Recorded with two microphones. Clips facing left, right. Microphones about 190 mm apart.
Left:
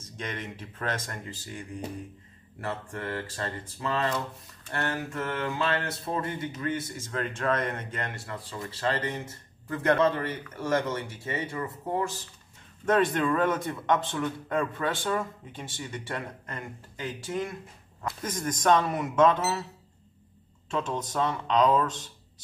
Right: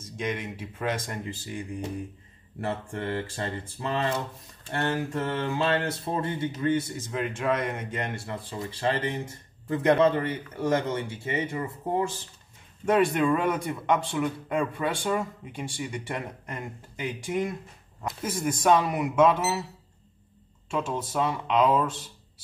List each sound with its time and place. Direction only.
0.0 s a man's voice: 10° right (ahead or behind)
7.2 s a man's voice: 15° right (ahead or behind)
12.8 s a man's voice: 10° right (ahead or behind)
20.7 s a man's voice: 10° right (ahead or behind)